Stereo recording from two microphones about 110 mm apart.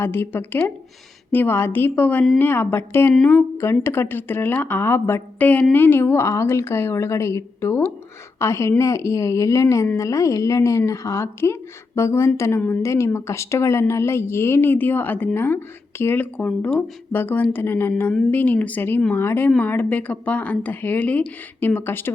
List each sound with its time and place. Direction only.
0.0 s a woman's voice: 20° left (ahead or behind)